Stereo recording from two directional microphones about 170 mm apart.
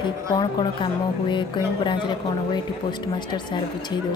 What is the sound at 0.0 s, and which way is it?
A woman's voice, 25° left (ahead or behind).